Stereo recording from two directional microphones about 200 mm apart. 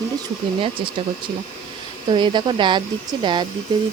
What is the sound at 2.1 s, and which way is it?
Speech, 25° right (ahead or behind).